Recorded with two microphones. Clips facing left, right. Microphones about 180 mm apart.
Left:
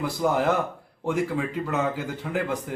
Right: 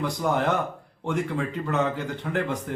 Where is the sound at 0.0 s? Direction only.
5° left (ahead or behind).